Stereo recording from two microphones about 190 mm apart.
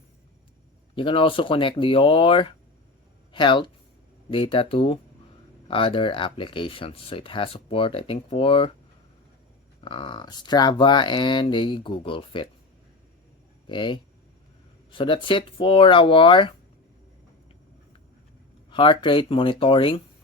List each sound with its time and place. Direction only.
0.9 s speech: 30° left (ahead or behind)
9.8 s speech: 25° left (ahead or behind)
13.7 s speech: 25° left (ahead or behind)
18.7 s speech: 25° left (ahead or behind)